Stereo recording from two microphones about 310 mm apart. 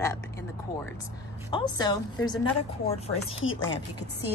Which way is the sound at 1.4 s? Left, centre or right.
Centre.